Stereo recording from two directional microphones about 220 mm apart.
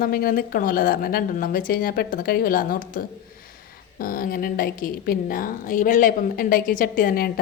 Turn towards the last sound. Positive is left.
turn(degrees=40)  # may be behind; listen again after turning